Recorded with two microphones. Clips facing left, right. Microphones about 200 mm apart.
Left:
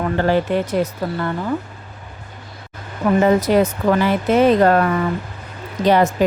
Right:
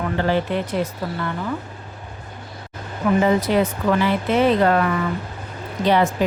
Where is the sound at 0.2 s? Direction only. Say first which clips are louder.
Left 3 dB; 45° left (ahead or behind).